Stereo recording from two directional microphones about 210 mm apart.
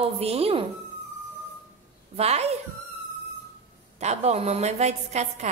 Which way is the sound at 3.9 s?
30° right (ahead or behind).